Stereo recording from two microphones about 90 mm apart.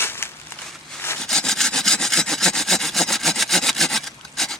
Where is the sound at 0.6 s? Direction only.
5° left (ahead or behind).